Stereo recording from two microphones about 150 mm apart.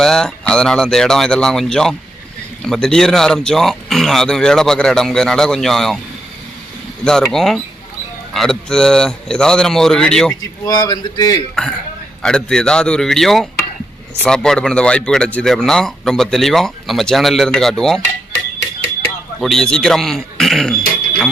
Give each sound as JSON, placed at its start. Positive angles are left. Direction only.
{"t": 0.0, "sound": "a man's voice", "side_deg": 5}
{"t": 7.0, "sound": "a man's voice", "side_deg": 5}
{"t": 10.7, "sound": "speech", "side_deg": 25}
{"t": 12.2, "sound": "a man's voice", "side_deg": 5}
{"t": 19.4, "sound": "a man's voice", "side_deg": 0}